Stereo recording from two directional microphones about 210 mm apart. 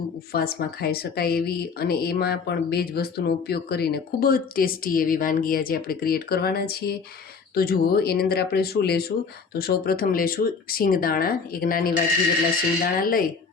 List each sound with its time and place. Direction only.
0.3 s speech: 45° left (ahead or behind)